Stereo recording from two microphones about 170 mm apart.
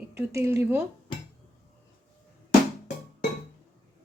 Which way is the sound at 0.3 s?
15° right (ahead or behind).